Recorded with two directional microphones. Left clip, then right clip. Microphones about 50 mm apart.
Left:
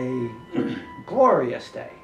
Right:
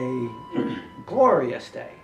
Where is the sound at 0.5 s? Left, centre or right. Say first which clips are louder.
Left 1 dB; centre.